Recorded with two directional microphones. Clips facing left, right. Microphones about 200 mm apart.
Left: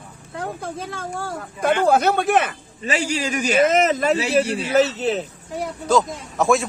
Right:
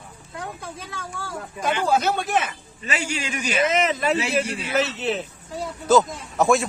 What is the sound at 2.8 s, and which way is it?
A man's voice, 35° left (ahead or behind).